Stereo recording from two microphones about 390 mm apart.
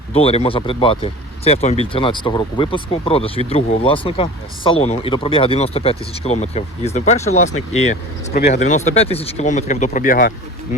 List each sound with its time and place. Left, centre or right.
0.1 s speech: centre